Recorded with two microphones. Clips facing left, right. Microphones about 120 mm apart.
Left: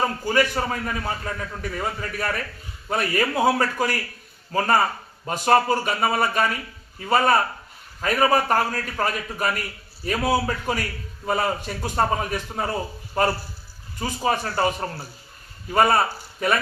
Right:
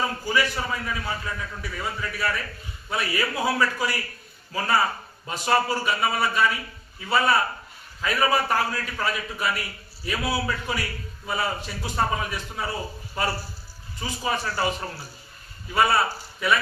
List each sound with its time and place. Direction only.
0.0 s a man's voice: 45° left (ahead or behind)